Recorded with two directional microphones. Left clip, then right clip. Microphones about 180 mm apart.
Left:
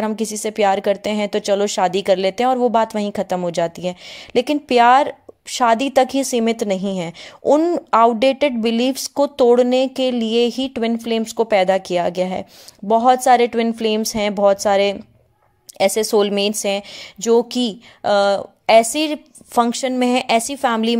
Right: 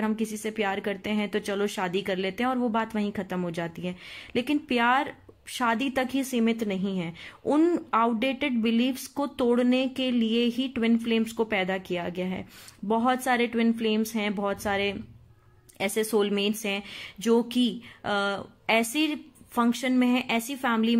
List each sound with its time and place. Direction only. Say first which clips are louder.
0.0 s a woman's voice: left 8 dB; 40° left (ahead or behind)